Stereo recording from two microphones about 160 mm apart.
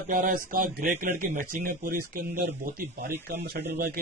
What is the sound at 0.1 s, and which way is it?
Speech, 55° right (ahead or behind).